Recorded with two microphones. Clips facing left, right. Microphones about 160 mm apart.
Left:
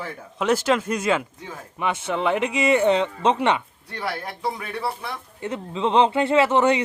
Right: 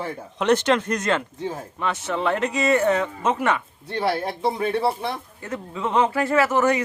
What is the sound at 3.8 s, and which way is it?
Speech, 25° right (ahead or behind).